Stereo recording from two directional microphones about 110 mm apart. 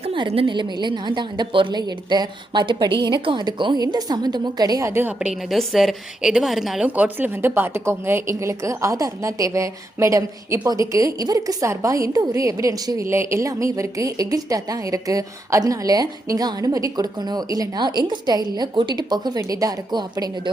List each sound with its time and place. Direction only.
0.0 s a sound: 55° right (ahead or behind)
0.3 s a woman's voice: 45° right (ahead or behind); by 5.1 s 20° right (ahead or behind)
5.4 s a woman's voice: centre (ahead or behind)
6.8 s a woman's voice: 15° right (ahead or behind); by 20.5 s 40° right (ahead or behind)